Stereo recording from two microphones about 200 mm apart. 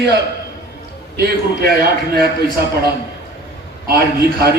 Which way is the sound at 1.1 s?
50° right (ahead or behind).